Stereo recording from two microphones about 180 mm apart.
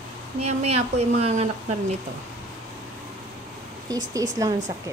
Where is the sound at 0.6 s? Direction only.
35° right (ahead or behind).